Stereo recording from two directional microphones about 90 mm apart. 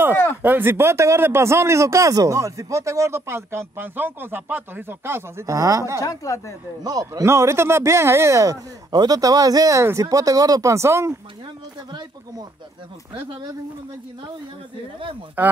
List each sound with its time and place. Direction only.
0.1 s a sound: 25° left (ahead or behind)
0.4 s speech: 20° right (ahead or behind)
5.9 s a woman's voice: 40° left (ahead or behind)
6.8 s speech: 45° right (ahead or behind)
7.2 s speech: 30° right (ahead or behind)
8.9 s speech: 45° right (ahead or behind); by 11.1 s 30° right (ahead or behind)
15.4 s speech: 20° right (ahead or behind)